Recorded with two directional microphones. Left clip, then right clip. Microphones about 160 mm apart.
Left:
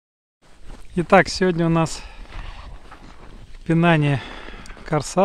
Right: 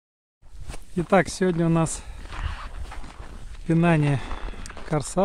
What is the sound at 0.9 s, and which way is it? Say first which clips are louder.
Speech: left 6 dB; 5° left (ahead or behind).